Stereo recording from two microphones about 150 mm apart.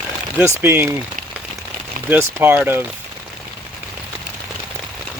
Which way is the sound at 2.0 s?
15° right (ahead or behind).